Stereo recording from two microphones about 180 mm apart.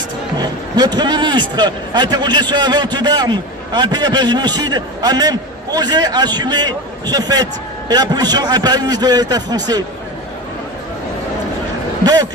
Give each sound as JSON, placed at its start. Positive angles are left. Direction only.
{"t": 0.3, "sound": "a man's voice", "side_deg": -25}
{"t": 12.0, "sound": "a man's voice", "side_deg": -20}